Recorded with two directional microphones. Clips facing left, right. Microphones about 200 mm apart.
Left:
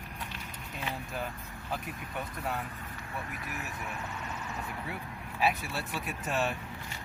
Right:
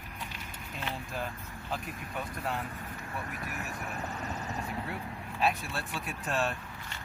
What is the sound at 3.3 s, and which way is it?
Speech, 40° right (ahead or behind).